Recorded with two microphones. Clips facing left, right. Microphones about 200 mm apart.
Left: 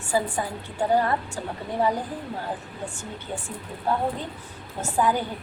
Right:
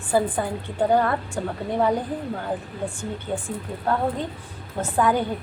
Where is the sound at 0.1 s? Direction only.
55° right (ahead or behind).